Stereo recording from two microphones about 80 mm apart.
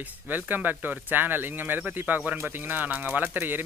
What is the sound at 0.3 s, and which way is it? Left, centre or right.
Speech, right.